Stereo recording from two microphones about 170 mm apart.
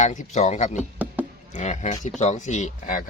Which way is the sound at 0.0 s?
45° left (ahead or behind).